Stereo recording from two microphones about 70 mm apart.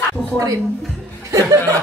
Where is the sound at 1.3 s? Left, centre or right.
Right.